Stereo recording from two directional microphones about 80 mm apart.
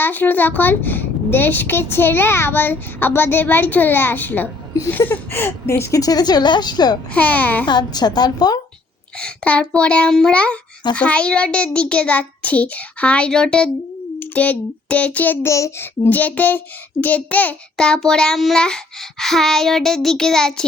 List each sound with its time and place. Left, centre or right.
0.0 s a woman's voice: left
6.0 s a woman's voice: left
7.1 s a woman's voice: centre
7.7 s a woman's voice: left
9.1 s a child's voice: centre
15.4 s a child's voice: left
16.0 s a child's voice: left; by 18.6 s centre
19.2 s child singing: centre